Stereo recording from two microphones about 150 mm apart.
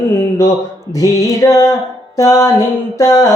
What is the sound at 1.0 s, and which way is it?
Mantra, 25° left (ahead or behind).